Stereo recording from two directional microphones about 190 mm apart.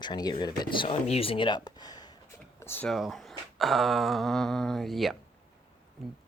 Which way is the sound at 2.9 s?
Centre (ahead or behind).